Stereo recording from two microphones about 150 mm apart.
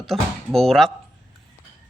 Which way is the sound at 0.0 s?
Centre (ahead or behind).